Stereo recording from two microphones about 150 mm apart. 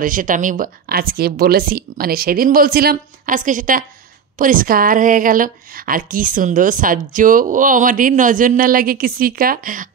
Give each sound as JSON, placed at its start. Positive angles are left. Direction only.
{"t": 0.0, "sound": "a woman's voice", "side_deg": -65}